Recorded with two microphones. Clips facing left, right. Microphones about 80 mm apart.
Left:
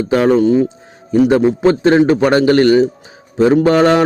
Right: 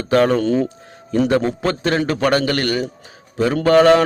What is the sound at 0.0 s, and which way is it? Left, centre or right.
A man's voice, centre.